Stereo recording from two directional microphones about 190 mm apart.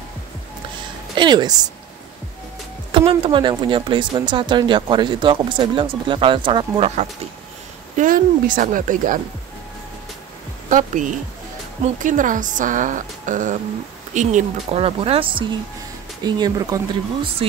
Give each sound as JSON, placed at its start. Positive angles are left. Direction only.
{"t": 1.1, "sound": "speech", "side_deg": -25}
{"t": 2.9, "sound": "speech", "side_deg": -30}
{"t": 8.0, "sound": "a woman's voice", "side_deg": -45}
{"t": 10.7, "sound": "a woman's voice", "side_deg": -45}